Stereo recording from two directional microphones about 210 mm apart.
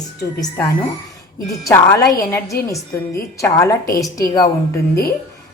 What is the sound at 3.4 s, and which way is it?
Speech, 15° left (ahead or behind).